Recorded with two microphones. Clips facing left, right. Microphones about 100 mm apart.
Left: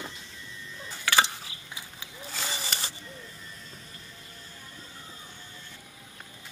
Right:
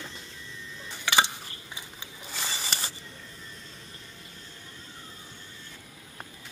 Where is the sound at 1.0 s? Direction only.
20° right (ahead or behind).